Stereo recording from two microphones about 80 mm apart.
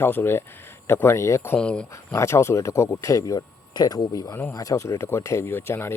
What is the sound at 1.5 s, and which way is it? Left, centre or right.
Speech, centre.